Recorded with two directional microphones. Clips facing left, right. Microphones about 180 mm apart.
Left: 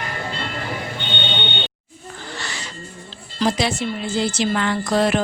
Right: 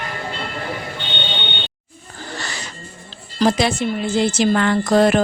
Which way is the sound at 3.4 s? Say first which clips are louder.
Right 4 dB; 50° right (ahead or behind).